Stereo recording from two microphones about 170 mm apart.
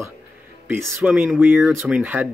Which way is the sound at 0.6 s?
10° right (ahead or behind).